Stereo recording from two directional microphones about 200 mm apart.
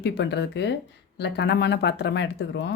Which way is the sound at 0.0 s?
60° left (ahead or behind).